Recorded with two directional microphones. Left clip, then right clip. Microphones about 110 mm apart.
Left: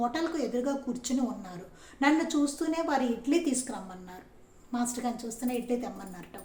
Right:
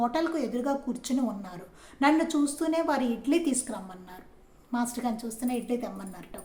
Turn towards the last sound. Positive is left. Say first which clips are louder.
# right 1 dB
turn(degrees=-25)  # may be behind; listen again after turning